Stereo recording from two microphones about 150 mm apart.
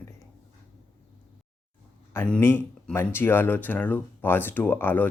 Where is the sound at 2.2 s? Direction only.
10° left (ahead or behind).